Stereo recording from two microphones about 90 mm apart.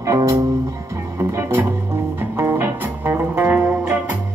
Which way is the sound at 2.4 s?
25° right (ahead or behind).